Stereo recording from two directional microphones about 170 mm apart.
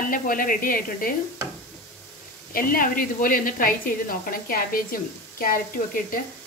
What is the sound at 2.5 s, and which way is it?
A woman's voice, 55° left (ahead or behind).